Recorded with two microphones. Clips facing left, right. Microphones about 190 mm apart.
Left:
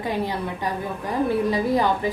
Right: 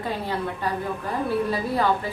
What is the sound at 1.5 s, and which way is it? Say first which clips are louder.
Speech: left 2 dB; 15° left (ahead or behind).